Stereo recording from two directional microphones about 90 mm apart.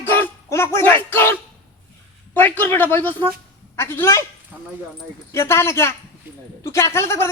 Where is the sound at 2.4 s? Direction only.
20° left (ahead or behind).